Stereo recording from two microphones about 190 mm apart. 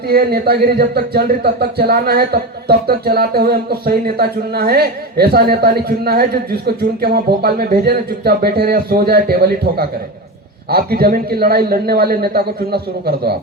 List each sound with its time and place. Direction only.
0.1 s speech: 55° right (ahead or behind)